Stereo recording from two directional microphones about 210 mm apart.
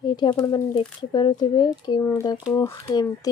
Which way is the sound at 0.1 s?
20° left (ahead or behind).